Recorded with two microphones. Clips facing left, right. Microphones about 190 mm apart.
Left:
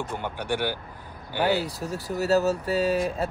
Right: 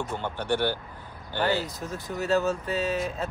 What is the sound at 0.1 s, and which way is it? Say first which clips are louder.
Speech: right 1 dB; 10° left (ahead or behind).